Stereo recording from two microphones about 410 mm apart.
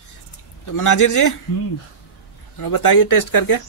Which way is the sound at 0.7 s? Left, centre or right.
Left.